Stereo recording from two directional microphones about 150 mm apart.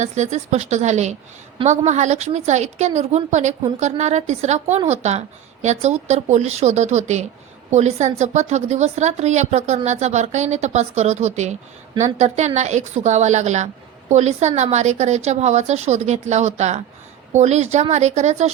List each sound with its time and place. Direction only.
0.0 s a woman's voice: 50° right (ahead or behind)